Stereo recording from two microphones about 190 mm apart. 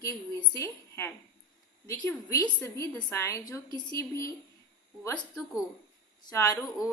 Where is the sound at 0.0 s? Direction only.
15° left (ahead or behind).